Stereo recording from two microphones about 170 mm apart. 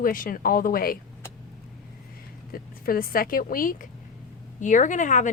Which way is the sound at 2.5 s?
60° left (ahead or behind).